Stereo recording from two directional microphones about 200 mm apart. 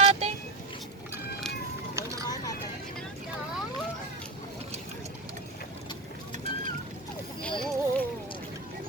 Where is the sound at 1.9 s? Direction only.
15° right (ahead or behind).